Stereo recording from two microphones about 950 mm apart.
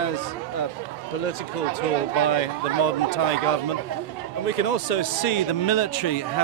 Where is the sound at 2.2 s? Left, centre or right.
Left.